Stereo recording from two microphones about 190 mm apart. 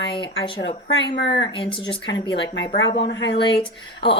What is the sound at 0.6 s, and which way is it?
Speech, 60° left (ahead or behind).